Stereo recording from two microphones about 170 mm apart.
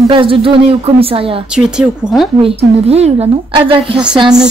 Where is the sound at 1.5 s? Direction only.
5° right (ahead or behind).